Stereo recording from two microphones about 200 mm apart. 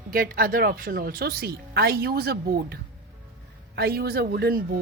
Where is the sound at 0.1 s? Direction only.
50° right (ahead or behind).